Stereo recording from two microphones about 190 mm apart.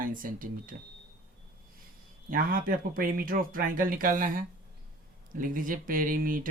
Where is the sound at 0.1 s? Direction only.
45° right (ahead or behind).